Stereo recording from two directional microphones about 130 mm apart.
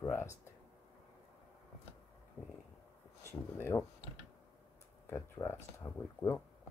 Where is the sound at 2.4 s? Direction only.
15° right (ahead or behind).